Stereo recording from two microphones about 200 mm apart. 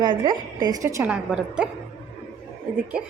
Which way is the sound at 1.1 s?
5° right (ahead or behind).